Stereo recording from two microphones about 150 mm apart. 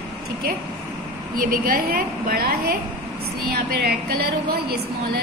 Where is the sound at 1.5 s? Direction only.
75° right (ahead or behind).